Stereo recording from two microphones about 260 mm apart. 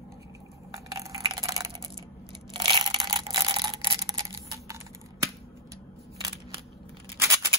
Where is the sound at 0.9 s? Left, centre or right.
Centre.